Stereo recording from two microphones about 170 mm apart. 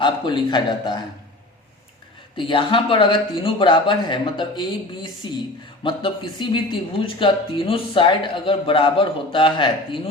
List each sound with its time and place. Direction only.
0.0 s speech: 25° left (ahead or behind)
2.3 s speech: 30° left (ahead or behind)